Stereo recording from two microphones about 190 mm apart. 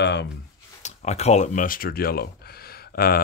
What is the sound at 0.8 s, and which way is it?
Speech, 35° left (ahead or behind).